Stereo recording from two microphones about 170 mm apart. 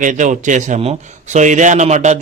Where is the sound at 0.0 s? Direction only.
45° right (ahead or behind).